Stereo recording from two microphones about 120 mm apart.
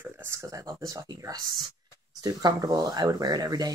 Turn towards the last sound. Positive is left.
turn(degrees=-35)  # may be behind; listen again after turning